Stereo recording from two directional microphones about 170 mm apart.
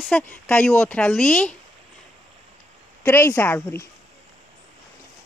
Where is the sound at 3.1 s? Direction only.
10° left (ahead or behind).